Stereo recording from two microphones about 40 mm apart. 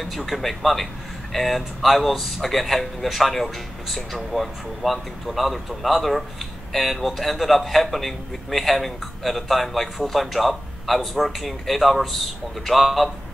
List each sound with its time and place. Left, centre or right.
0.0 s a man's voice: centre